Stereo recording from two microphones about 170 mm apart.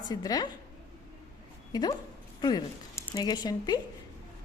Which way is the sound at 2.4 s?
25° left (ahead or behind).